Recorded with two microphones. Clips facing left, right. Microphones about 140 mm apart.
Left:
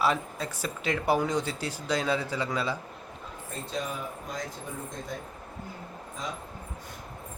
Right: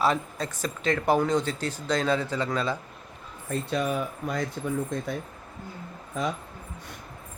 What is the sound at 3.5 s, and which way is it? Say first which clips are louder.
Speech: right 7 dB; 65° right (ahead or behind).